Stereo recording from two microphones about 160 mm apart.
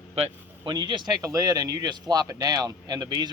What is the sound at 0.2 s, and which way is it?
Speech, 30° right (ahead or behind).